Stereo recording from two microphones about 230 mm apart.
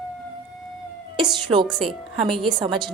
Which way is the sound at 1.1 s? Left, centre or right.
Right.